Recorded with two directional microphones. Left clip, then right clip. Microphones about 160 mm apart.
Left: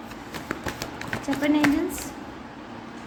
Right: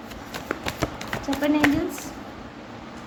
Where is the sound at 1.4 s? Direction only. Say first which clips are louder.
Even; 5° right (ahead or behind).